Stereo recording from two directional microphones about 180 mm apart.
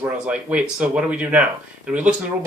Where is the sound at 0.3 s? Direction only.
5° right (ahead or behind).